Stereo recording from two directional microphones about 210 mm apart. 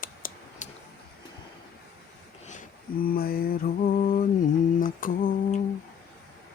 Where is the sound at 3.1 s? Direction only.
45° left (ahead or behind).